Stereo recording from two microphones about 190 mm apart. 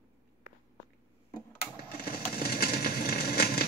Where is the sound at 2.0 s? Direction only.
50° left (ahead or behind).